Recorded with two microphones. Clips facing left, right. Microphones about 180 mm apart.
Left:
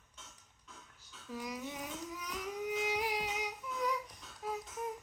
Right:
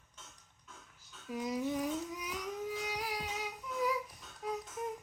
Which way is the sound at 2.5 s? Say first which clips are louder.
Left 6 dB; 20° left (ahead or behind).